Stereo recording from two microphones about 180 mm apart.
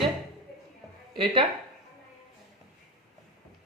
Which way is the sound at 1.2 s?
30° right (ahead or behind).